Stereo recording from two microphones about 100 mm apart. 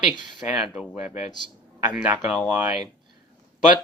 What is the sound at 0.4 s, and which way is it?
Speech, 10° right (ahead or behind).